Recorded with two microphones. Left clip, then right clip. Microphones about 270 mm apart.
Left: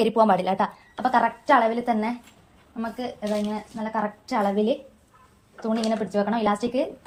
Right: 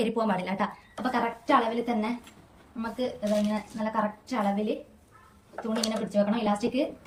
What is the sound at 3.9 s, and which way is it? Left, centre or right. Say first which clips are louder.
Speech: left 3 dB; centre.